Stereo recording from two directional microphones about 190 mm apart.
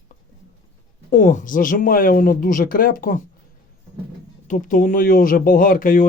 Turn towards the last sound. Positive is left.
turn(degrees=45)  # may be behind; listen again after turning